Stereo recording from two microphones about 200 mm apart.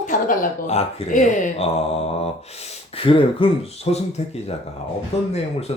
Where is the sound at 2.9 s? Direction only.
25° left (ahead or behind).